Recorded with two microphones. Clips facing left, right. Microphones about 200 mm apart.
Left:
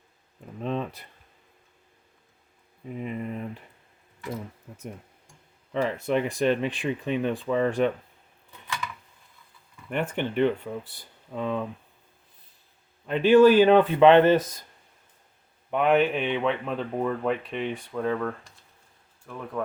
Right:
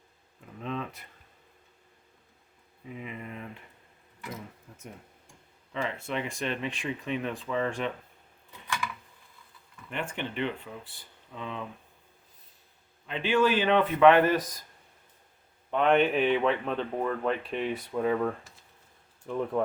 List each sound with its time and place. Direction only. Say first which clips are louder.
0.6 s speech: left 5 dB; 35° left (ahead or behind)
2.9 s speech: left 7 dB; 45° left (ahead or behind)
5.7 s speech: left 7 dB; 45° left (ahead or behind)
9.9 s speech: left 7 dB; 50° left (ahead or behind)
13.1 s speech: left 9 dB; 40° left (ahead or behind); by 14.6 s 25° left (ahead or behind)
15.7 s speech: left 2 dB; 5° left (ahead or behind); by 18.5 s 10° right (ahead or behind)
19.2 s speech: right 4 dB; 20° right (ahead or behind)